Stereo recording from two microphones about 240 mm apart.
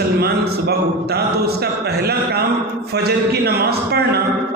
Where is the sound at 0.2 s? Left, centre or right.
Right.